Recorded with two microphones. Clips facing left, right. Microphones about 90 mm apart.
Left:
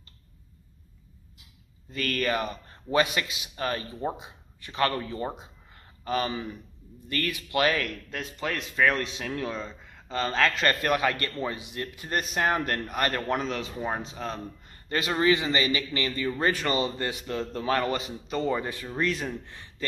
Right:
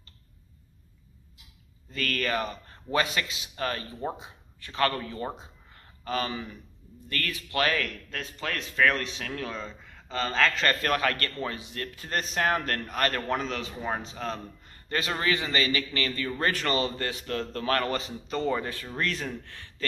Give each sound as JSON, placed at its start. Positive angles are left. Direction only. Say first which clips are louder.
{"t": 1.9, "sound": "a man's voice", "louder": "left 2 dB", "side_deg": 20}